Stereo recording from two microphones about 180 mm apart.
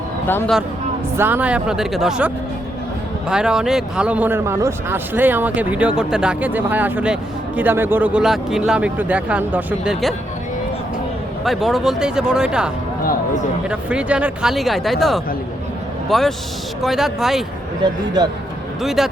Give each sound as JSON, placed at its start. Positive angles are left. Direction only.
{"t": 0.3, "sound": "speech", "side_deg": 10}
{"t": 1.1, "sound": "speech", "side_deg": -10}
{"t": 11.4, "sound": "a man's voice", "side_deg": 0}
{"t": 17.8, "sound": "a man's voice", "side_deg": -25}
{"t": 18.8, "sound": "speech", "side_deg": 0}